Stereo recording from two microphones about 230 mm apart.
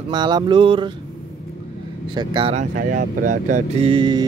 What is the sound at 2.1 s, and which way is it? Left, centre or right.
Speech, centre.